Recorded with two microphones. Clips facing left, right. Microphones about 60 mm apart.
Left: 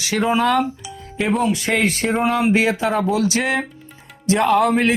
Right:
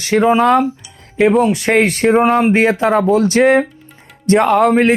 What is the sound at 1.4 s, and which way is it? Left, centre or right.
Speech, right.